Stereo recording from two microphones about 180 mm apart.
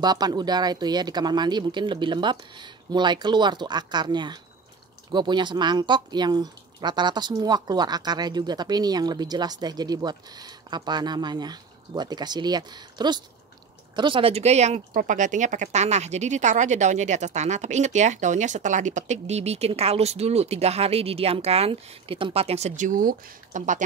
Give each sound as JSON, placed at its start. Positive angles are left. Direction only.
{"t": 0.0, "sound": "speech", "side_deg": -20}